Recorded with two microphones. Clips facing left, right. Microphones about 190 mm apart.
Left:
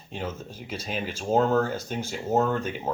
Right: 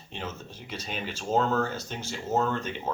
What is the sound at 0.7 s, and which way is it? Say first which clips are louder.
Speech: left 4 dB; 10° left (ahead or behind).